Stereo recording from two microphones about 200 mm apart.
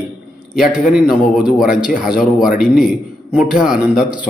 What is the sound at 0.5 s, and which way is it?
A man's voice, centre (ahead or behind).